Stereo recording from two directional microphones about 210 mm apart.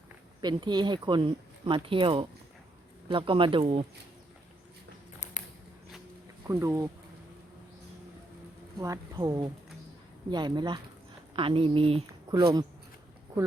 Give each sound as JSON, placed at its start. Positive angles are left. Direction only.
{"t": 0.4, "sound": "speech", "side_deg": -20}
{"t": 5.2, "sound": "a sound", "side_deg": 35}
{"t": 6.5, "sound": "speech", "side_deg": -15}
{"t": 8.8, "sound": "speech", "side_deg": -15}